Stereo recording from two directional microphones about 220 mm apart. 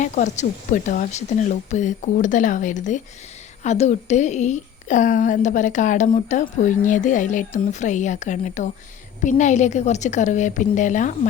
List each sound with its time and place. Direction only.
0.0 s a woman's voice: 35° left (ahead or behind)